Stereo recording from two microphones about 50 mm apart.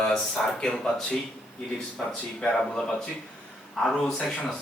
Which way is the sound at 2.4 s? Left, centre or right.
Centre.